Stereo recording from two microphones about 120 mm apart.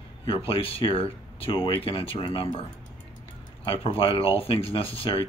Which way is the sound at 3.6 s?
50° left (ahead or behind).